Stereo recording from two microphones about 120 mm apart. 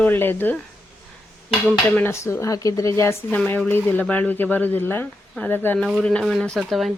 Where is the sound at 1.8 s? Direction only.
20° left (ahead or behind).